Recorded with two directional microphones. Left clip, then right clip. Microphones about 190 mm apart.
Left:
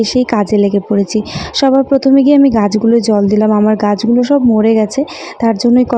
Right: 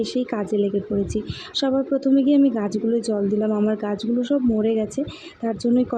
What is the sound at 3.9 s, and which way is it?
Speech, 90° left.